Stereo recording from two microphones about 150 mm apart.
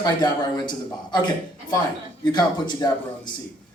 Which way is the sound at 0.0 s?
30° left (ahead or behind).